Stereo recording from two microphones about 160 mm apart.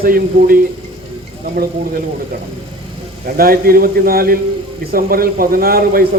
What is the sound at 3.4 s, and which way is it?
A man's voice, 70° right (ahead or behind).